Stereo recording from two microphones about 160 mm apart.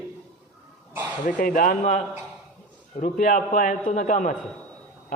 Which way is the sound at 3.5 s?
60° left (ahead or behind).